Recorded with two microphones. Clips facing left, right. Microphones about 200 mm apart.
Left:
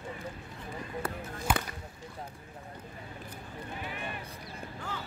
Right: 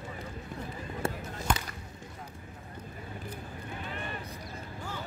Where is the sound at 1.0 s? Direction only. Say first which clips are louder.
Right 6 dB; 25° right (ahead or behind).